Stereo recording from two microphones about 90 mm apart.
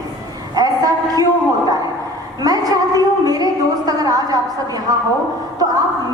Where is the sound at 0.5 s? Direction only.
45° right (ahead or behind).